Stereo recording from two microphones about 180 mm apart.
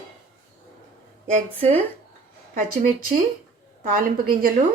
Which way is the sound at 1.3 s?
35° right (ahead or behind).